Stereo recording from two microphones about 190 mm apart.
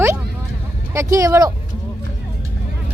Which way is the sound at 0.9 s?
15° right (ahead or behind).